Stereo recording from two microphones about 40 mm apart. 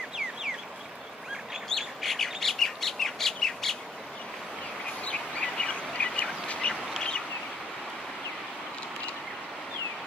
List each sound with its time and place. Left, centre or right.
1.7 s bird: centre
5.0 s bird: left
6.4 s duck: left